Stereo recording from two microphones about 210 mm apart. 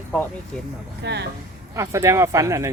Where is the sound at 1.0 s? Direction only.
55° right (ahead or behind).